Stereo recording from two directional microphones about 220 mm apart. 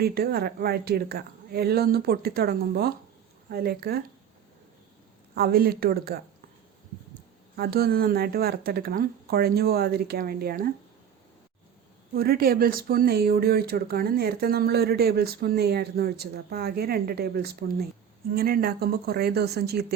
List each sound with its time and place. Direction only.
0.0 s speech: 45° right (ahead or behind)
5.3 s speech: 45° right (ahead or behind)
7.5 s speech: 45° right (ahead or behind)
12.1 s speech: 45° right (ahead or behind)